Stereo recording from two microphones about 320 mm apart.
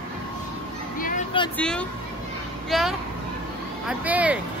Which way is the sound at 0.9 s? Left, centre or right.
Left.